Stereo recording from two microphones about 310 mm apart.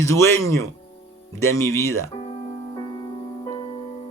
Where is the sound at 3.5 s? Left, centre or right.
Centre.